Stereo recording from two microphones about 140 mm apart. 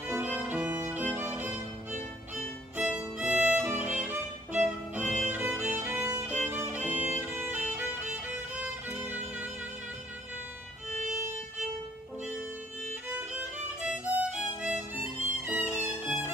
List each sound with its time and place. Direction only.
0.1 s violin: 10° right (ahead or behind)
7.7 s music: 10° right (ahead or behind)
10.9 s violin: 60° right (ahead or behind)
13.1 s violin: 10° right (ahead or behind)
15.4 s music: 10° right (ahead or behind)